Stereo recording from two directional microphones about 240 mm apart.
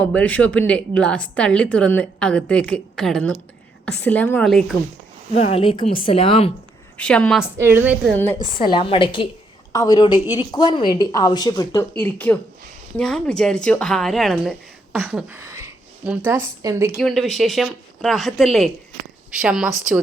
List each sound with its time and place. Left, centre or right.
0.0 s a woman's voice: centre
5.3 s a woman's voice: left
6.9 s a woman's voice: centre
7.6 s a woman's voice: centre
8.1 s speech: centre
8.5 s a woman's voice: left; by 19.7 s centre